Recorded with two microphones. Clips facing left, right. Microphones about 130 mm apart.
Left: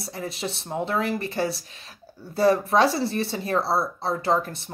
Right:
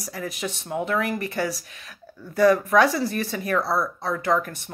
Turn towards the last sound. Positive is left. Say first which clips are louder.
# even
turn(degrees=30)  # may be behind; listen again after turning